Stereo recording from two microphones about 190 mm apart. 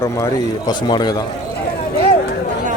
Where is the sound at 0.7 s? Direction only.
20° left (ahead or behind).